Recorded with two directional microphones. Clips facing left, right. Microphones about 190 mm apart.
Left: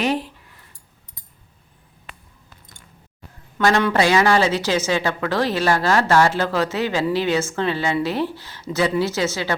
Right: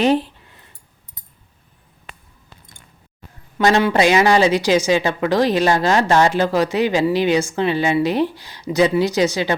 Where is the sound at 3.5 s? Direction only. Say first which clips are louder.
Right 2 dB; 20° right (ahead or behind).